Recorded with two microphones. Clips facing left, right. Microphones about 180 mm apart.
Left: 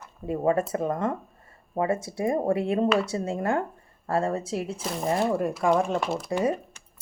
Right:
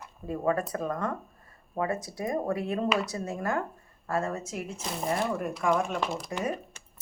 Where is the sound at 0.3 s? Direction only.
25° left (ahead or behind).